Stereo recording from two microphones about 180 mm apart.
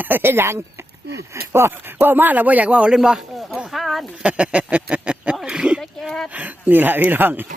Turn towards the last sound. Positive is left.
turn(degrees=-10)  # may be behind; listen again after turning